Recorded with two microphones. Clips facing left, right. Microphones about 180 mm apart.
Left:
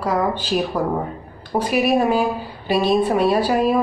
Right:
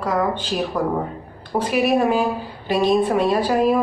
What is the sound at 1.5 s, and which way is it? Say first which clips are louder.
A woman's voice: even; 10° left (ahead or behind).